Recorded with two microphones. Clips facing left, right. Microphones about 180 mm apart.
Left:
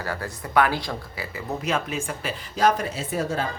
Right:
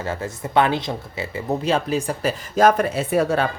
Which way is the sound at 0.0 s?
20° right (ahead or behind).